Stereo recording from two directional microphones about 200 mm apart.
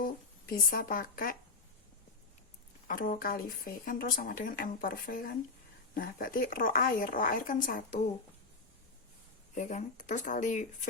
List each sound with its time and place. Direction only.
0.5 s speech: 45° left (ahead or behind)
2.8 s speech: 45° left (ahead or behind)
9.6 s speech: 40° left (ahead or behind)